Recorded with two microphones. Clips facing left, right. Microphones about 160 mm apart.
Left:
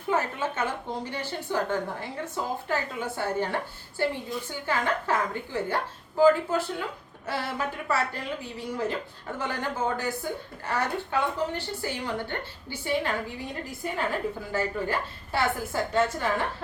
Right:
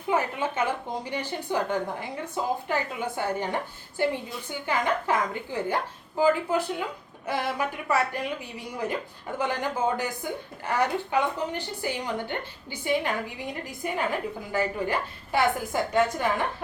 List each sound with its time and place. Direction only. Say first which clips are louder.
0.1 s a woman's voice: right 1 dB; 15° right (ahead or behind)